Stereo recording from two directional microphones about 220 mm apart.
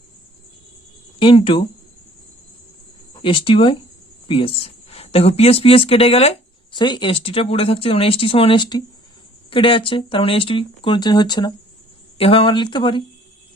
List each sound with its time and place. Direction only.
1.2 s speech: 25° left (ahead or behind)
3.2 s speech: 25° left (ahead or behind)